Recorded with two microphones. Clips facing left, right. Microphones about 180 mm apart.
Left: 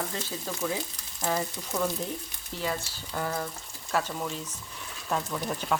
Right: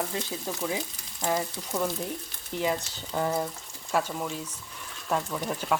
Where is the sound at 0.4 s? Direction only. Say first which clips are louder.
Left 2 dB; 15° right (ahead or behind).